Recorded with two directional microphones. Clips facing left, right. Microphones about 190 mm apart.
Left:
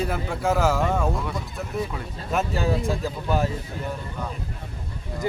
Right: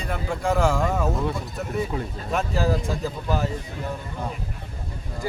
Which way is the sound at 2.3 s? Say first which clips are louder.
Even; centre (ahead or behind).